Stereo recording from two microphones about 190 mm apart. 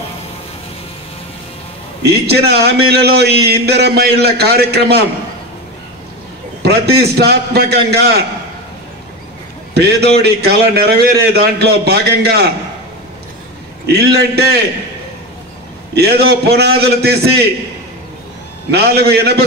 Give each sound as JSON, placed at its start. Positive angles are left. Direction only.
{"t": 2.0, "sound": "a man's voice", "side_deg": -60}
{"t": 6.6, "sound": "a man's voice", "side_deg": -60}
{"t": 9.8, "sound": "a man's voice", "side_deg": -60}
{"t": 13.8, "sound": "a man's voice", "side_deg": -60}
{"t": 15.9, "sound": "a man's voice", "side_deg": -60}
{"t": 18.7, "sound": "a man's voice", "side_deg": -60}